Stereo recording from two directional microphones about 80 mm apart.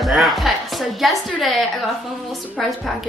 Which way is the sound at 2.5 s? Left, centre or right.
Centre.